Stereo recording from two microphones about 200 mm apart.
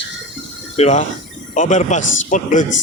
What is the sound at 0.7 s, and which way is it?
Speech, 35° left (ahead or behind).